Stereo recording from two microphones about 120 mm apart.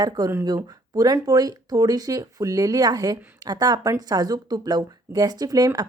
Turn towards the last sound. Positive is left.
turn(degrees=-30)  # may be behind; listen again after turning